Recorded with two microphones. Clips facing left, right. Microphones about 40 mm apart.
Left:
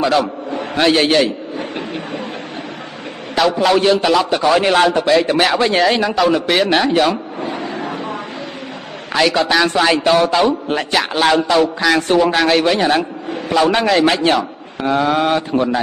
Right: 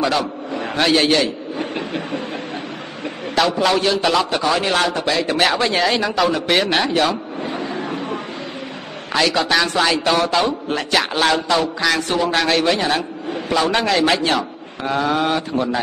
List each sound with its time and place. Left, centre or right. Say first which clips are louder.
0.0 s a man's voice: left 4 dB; centre
3.3 s a man's voice: left 3 dB; centre
7.7 s vehicle: left 1 dB; left
9.1 s a man's voice: left 3 dB; centre
14.9 s mantra: left 4 dB; centre